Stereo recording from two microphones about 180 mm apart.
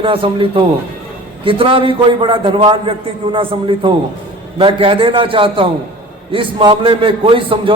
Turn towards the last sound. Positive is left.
turn(degrees=-30)  # may be behind; listen again after turning